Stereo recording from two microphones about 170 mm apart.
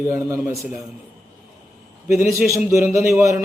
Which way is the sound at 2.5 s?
15° right (ahead or behind).